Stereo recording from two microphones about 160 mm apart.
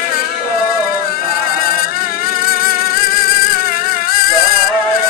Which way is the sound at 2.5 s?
65° left (ahead or behind).